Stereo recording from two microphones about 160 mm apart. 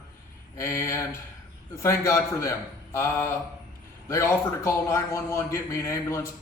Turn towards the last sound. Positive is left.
turn(degrees=15)  # may be behind; listen again after turning